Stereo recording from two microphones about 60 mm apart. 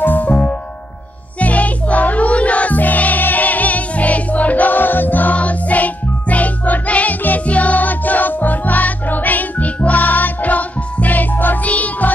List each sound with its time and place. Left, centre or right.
0.0 s music: left
0.3 s music: left